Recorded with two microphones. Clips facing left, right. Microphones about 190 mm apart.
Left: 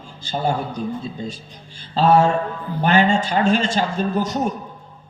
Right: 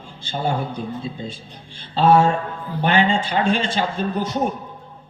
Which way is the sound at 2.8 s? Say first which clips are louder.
Left 2 dB; 45° left (ahead or behind).